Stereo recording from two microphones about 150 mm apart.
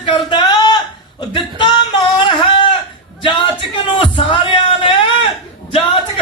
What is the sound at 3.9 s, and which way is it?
Speech, 35° left (ahead or behind).